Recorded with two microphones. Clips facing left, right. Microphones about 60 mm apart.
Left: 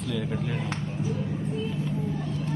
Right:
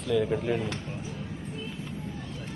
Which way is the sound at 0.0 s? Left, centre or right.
Centre.